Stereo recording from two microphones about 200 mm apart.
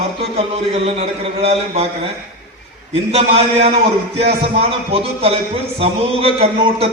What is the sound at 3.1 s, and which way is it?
A man's voice, 30° right (ahead or behind).